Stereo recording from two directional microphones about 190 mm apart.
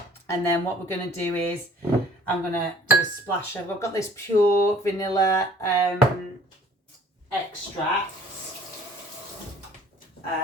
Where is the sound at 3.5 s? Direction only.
15° left (ahead or behind).